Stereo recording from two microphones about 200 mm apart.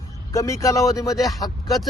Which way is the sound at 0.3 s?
15° left (ahead or behind).